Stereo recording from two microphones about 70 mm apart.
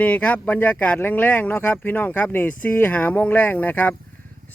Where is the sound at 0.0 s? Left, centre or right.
Left.